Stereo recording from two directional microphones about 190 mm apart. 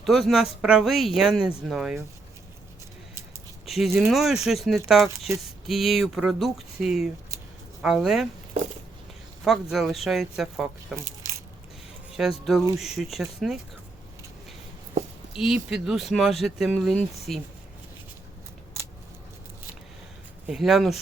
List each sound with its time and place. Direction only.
0.0 s speech: centre (ahead or behind)
3.7 s speech: centre (ahead or behind)
9.4 s speech: centre (ahead or behind)
12.1 s speech: centre (ahead or behind)
15.4 s speech: 5° right (ahead or behind)
20.5 s speech: centre (ahead or behind)